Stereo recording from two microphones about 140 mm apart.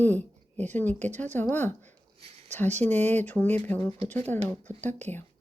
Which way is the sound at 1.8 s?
55° right (ahead or behind).